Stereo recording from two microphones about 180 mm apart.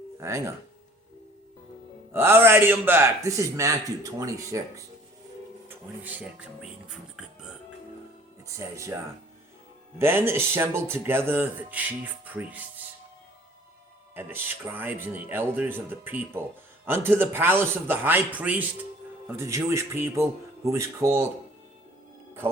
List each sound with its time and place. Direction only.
0.2 s speech: 15° right (ahead or behind)
2.1 s speech: 15° right (ahead or behind)
8.4 s speech: 15° right (ahead or behind)
10.0 s speech: 15° right (ahead or behind)
14.2 s speech: 10° right (ahead or behind)